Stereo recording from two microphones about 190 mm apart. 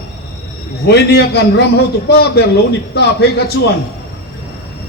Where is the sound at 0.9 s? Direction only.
60° left (ahead or behind).